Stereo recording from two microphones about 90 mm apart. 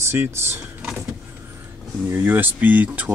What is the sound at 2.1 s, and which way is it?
Speech, 20° right (ahead or behind).